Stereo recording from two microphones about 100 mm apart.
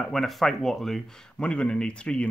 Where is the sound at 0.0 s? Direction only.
5° left (ahead or behind).